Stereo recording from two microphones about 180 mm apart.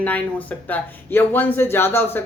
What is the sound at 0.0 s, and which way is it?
Speech, 10° left (ahead or behind).